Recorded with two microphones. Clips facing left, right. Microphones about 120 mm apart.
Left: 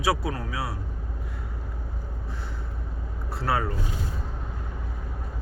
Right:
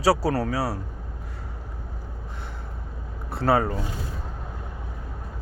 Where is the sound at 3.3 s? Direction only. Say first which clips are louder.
Right 5 dB; 30° right (ahead or behind).